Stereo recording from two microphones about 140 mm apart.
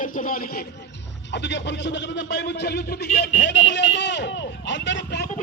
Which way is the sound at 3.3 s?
45° left (ahead or behind).